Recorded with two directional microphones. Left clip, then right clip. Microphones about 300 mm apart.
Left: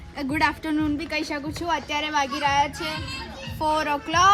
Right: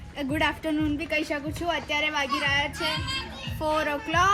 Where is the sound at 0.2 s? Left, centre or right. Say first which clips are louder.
Left 3 dB; centre.